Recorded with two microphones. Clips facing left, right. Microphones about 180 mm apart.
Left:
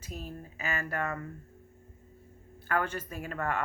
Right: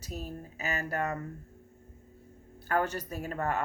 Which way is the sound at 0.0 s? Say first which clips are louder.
Right 2 dB; 40° right (ahead or behind).